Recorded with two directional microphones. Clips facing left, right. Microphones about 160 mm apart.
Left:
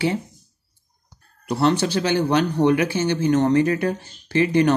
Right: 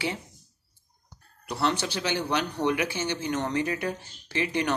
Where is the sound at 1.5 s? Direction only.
40° left (ahead or behind).